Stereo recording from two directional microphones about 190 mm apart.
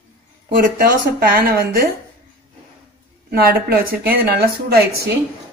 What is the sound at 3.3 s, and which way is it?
Speech, 55° right (ahead or behind).